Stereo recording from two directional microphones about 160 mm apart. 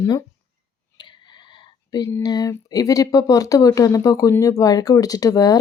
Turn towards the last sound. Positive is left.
turn(degrees=25)  # may be behind; listen again after turning